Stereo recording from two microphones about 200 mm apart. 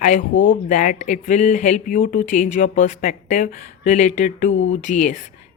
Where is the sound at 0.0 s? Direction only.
40° left (ahead or behind).